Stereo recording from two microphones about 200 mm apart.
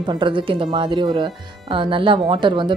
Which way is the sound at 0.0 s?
25° right (ahead or behind).